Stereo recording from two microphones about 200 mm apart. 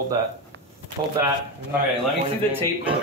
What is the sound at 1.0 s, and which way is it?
Speech, 35° right (ahead or behind).